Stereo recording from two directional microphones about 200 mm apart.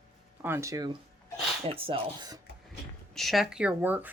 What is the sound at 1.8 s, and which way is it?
Speech, 25° right (ahead or behind).